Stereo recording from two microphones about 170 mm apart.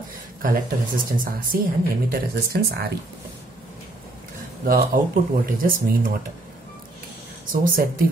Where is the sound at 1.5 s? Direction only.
65° right (ahead or behind).